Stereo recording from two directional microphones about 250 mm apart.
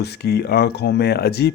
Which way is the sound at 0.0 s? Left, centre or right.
Left.